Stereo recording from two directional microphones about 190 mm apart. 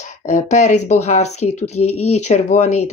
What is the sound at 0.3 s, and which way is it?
Speech, 40° left (ahead or behind).